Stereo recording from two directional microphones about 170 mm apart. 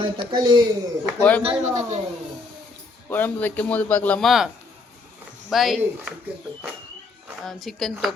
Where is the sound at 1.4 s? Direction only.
40° right (ahead or behind).